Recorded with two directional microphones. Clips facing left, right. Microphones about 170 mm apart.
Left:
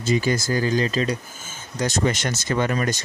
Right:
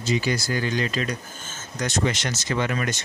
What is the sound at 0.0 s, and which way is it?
Speech, 45° left (ahead or behind).